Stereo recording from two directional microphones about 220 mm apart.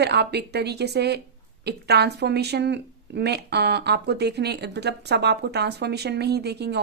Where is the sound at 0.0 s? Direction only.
50° right (ahead or behind).